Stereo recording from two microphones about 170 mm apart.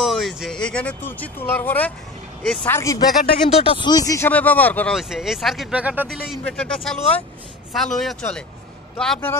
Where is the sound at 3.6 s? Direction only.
30° left (ahead or behind); by 4.9 s 10° left (ahead or behind).